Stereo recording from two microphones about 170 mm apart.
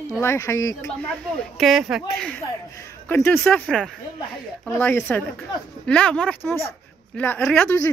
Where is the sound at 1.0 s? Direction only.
5° left (ahead or behind).